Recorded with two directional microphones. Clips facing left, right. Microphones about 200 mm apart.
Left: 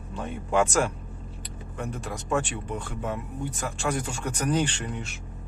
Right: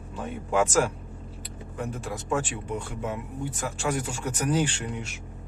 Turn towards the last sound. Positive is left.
turn(degrees=-10)  # may be behind; listen again after turning